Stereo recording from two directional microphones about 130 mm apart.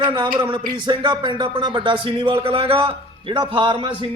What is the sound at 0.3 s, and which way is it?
A man's voice, 35° right (ahead or behind).